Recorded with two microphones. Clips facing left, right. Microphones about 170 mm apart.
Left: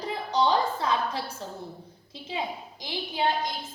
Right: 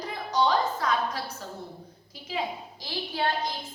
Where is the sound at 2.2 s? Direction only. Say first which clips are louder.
Right 1 dB; 20° left (ahead or behind).